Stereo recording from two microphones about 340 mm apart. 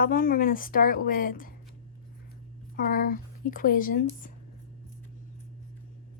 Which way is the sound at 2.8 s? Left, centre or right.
Left.